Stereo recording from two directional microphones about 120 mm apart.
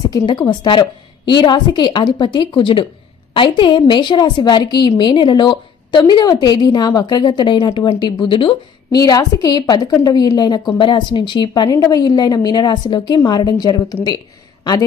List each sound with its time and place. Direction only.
0.1 s a woman's voice: 40° left (ahead or behind)
8.9 s a woman's voice: 30° left (ahead or behind)
14.0 s a sound: 35° left (ahead or behind)